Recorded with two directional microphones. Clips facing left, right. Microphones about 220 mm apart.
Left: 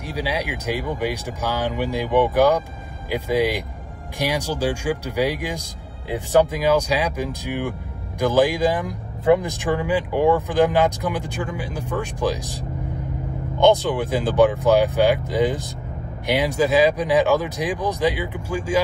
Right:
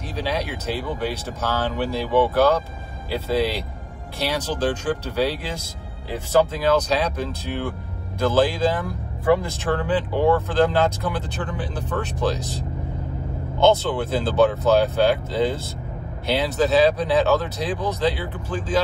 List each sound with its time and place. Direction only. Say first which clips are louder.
0.0 s speech: even; 10° left (ahead or behind)